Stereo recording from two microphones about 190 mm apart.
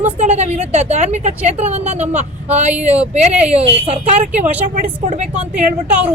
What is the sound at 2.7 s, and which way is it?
Speech, 5° right (ahead or behind).